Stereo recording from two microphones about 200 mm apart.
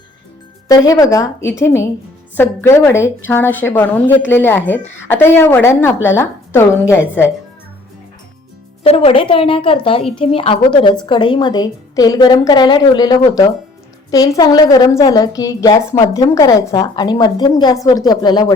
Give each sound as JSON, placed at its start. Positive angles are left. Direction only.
{"t": 0.7, "sound": "a woman's voice", "side_deg": 20}
{"t": 8.8, "sound": "a woman's voice", "side_deg": 30}